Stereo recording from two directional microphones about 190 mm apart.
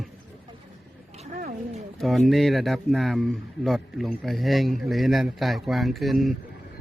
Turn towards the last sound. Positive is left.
turn(degrees=0)  # may be behind; listen again after turning